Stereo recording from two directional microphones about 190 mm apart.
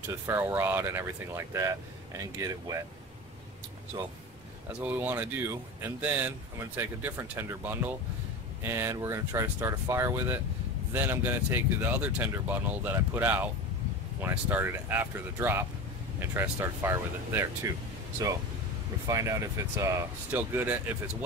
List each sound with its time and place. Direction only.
0.3 s speech: 10° right (ahead or behind)
4.7 s speech: 10° right (ahead or behind)
19.0 s speech: 15° right (ahead or behind)